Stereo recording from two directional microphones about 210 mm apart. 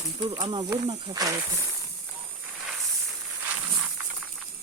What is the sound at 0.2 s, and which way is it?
Speech, 20° right (ahead or behind).